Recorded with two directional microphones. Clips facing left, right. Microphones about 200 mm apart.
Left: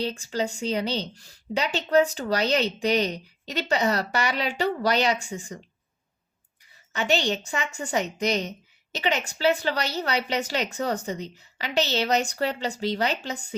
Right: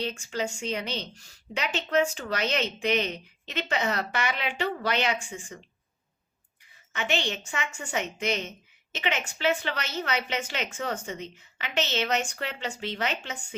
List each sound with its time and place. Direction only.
0.0 s a woman's voice: 35° left (ahead or behind)
6.9 s a woman's voice: 35° left (ahead or behind)